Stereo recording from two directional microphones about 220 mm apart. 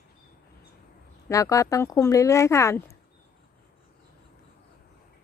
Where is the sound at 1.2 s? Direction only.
15° left (ahead or behind).